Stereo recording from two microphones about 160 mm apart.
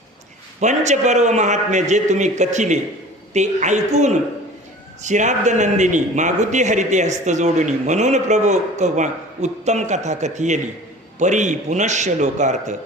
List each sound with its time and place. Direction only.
0.6 s a man's voice: 45° right (ahead or behind)